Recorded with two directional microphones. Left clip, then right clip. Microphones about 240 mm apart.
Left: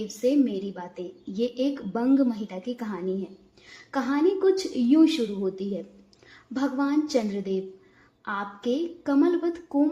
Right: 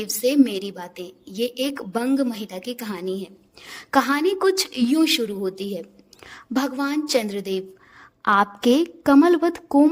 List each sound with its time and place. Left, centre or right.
0.2 s a woman's voice: right